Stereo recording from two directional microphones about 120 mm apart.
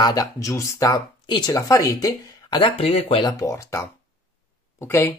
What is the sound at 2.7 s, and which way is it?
Speech, 55° left (ahead or behind).